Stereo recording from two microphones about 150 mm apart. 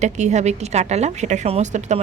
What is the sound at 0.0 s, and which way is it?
A woman's voice, 50° right (ahead or behind).